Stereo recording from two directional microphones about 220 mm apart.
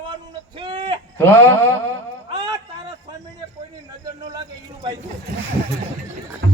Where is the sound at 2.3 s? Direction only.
20° right (ahead or behind).